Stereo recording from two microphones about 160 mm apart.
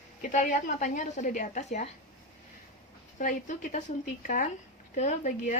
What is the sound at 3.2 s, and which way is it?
A woman's voice, 50° left (ahead or behind).